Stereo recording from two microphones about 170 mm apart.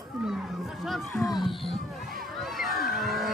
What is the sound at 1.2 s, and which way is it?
Speech, 25° left (ahead or behind).